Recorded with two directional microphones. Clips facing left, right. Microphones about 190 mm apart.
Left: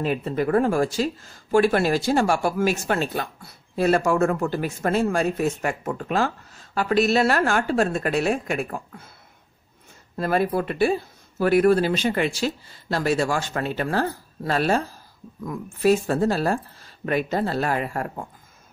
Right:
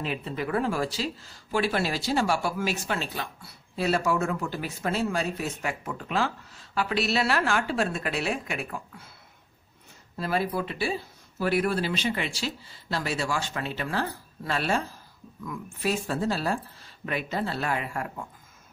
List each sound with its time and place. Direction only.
0.0 s speech: 45° left (ahead or behind)
10.1 s speech: 50° left (ahead or behind)